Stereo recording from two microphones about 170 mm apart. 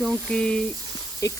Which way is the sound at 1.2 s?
20° left (ahead or behind).